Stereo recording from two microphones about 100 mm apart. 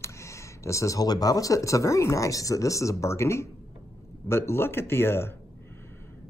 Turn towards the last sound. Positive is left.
turn(degrees=25)  # may be behind; listen again after turning